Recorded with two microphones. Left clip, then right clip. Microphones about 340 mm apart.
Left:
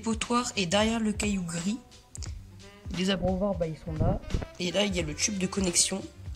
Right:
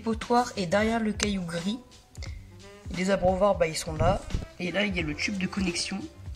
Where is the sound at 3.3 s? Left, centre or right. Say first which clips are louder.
Right 7 dB; right.